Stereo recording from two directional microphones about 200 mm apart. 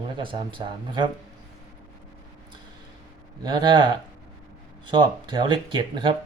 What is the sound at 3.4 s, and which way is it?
Speech, 20° right (ahead or behind).